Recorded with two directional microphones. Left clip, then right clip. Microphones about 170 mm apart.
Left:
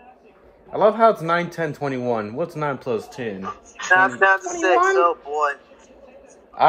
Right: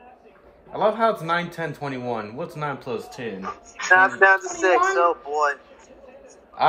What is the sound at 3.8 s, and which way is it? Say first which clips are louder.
A woman's voice: even; centre (ahead or behind).